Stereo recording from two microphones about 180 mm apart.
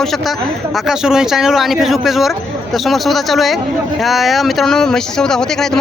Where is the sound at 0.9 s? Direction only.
5° right (ahead or behind).